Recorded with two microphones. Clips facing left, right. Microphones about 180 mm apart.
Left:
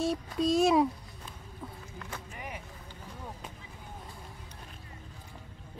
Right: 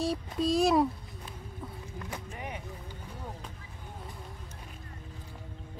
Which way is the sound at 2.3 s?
30° right (ahead or behind).